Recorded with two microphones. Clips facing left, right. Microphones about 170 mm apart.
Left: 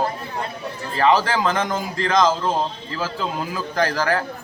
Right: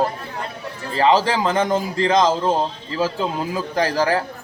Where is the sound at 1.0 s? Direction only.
30° right (ahead or behind).